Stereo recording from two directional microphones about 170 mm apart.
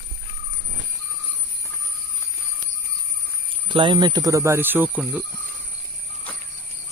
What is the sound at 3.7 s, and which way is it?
Speech, 30° right (ahead or behind).